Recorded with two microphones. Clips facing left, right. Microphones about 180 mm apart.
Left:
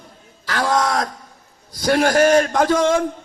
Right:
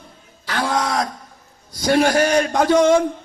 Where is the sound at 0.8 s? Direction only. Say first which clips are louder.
Left 1 dB; 50° left (ahead or behind).